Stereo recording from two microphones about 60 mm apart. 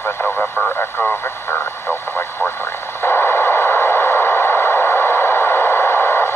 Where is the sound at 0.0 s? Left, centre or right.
Left.